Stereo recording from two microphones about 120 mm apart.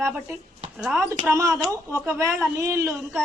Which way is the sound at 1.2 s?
25° right (ahead or behind).